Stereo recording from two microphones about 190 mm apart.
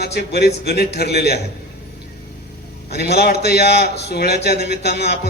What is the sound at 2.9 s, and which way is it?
Speech, 60° left (ahead or behind).